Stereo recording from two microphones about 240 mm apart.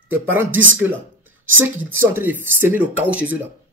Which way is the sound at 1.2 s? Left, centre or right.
Right.